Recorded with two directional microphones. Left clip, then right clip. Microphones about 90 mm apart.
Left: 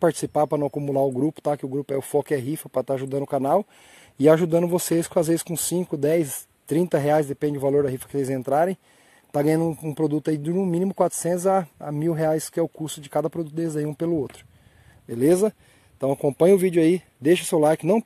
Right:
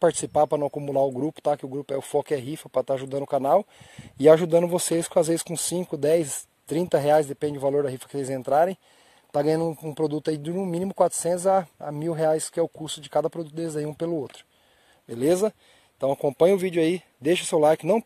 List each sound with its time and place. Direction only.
0.0 s speech: 20° right (ahead or behind)
3.4 s speech: 30° right (ahead or behind)